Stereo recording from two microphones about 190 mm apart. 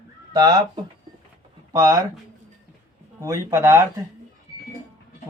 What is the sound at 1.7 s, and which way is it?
Speech, 20° right (ahead or behind).